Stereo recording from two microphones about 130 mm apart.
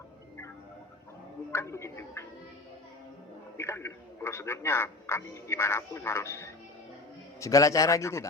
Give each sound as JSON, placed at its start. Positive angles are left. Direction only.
{"t": 1.5, "sound": "a man's voice", "side_deg": 20}
{"t": 3.6, "sound": "a man's voice", "side_deg": 20}